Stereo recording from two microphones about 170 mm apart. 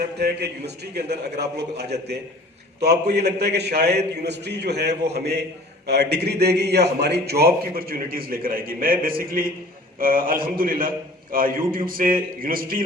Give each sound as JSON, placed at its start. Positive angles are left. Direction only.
{"t": 0.2, "sound": "a man's voice", "side_deg": -70}